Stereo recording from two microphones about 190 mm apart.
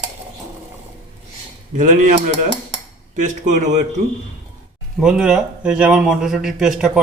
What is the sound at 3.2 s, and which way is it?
Speech, 40° right (ahead or behind).